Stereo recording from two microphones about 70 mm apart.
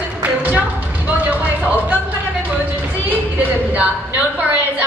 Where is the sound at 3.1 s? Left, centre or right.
Right.